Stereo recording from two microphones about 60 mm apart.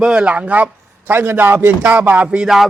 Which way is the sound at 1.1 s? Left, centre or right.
Right.